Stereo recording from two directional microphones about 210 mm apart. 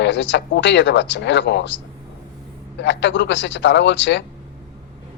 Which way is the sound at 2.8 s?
55° left (ahead or behind).